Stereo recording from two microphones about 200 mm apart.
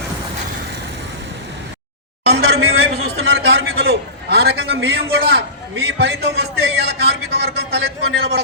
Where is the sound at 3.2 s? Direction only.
80° right.